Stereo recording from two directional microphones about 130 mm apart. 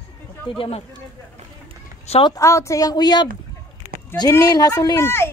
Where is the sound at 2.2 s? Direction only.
25° left (ahead or behind).